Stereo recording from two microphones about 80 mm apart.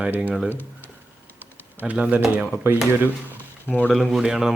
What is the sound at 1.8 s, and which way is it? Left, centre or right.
Speech, centre.